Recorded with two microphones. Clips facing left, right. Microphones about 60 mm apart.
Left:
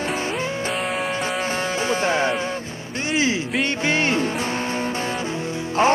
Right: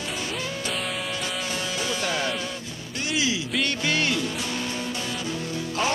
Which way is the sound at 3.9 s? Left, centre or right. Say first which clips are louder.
Left 6 dB; left.